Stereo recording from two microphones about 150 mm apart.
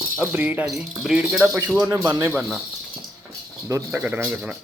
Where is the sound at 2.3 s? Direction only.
Centre (ahead or behind).